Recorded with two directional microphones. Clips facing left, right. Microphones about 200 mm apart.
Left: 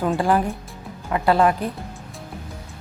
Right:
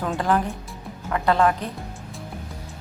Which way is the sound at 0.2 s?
10° left (ahead or behind).